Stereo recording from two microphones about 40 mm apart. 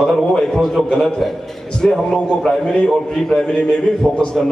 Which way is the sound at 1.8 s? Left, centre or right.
Centre.